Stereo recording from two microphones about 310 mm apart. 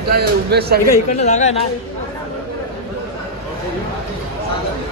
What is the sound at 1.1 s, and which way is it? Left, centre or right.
Speech, left.